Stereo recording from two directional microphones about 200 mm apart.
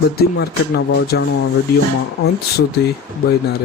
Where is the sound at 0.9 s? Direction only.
55° left (ahead or behind).